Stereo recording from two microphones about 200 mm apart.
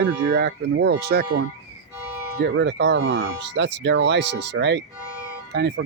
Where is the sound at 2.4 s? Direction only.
60° right (ahead or behind).